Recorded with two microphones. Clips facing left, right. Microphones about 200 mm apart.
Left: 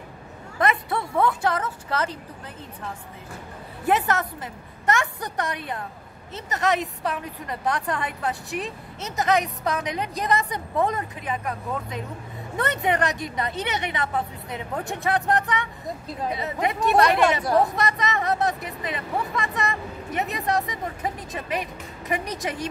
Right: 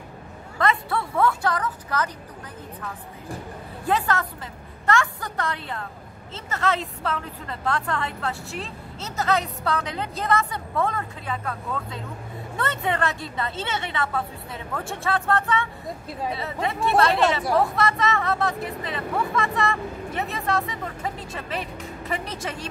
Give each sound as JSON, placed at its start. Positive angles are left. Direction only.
{"t": 0.6, "sound": "speech", "side_deg": 20}
{"t": 3.8, "sound": "a woman's voice", "side_deg": 20}